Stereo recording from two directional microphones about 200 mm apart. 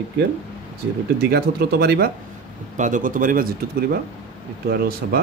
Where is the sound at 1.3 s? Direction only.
50° right (ahead or behind).